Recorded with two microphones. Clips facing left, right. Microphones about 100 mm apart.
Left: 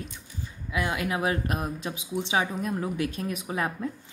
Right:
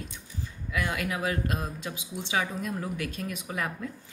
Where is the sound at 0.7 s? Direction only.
20° left (ahead or behind).